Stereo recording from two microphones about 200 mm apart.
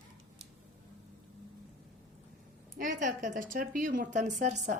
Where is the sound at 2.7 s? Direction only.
40° right (ahead or behind).